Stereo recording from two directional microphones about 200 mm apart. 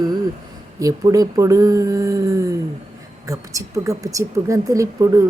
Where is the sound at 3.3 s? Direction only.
15° right (ahead or behind).